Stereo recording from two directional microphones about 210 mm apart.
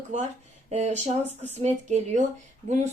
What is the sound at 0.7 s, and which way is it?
Speech, 35° right (ahead or behind).